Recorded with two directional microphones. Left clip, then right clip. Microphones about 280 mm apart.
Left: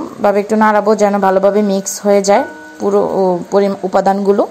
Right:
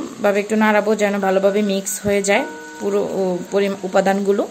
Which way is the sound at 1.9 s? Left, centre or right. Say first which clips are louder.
Left 8 dB; centre.